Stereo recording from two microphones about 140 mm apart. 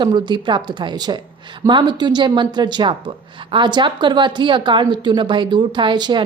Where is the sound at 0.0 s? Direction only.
30° right (ahead or behind).